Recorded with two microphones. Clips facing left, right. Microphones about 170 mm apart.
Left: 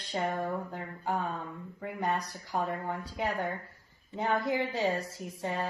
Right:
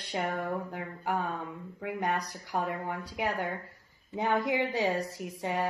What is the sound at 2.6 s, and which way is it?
Speech, 15° right (ahead or behind).